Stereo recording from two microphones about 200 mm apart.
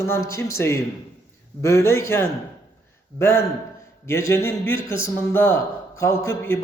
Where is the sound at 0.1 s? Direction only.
15° left (ahead or behind).